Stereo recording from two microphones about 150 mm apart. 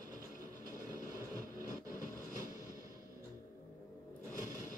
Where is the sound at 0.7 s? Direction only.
25° right (ahead or behind).